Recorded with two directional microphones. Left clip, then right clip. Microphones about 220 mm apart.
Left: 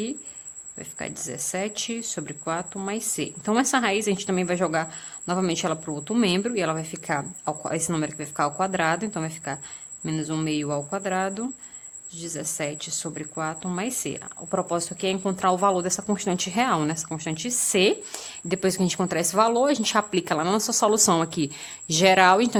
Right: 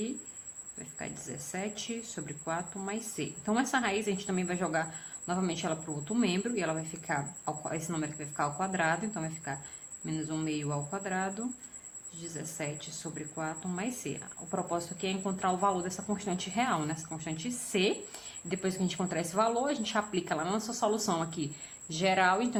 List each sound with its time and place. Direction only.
0.8 s a woman's voice: 45° left (ahead or behind)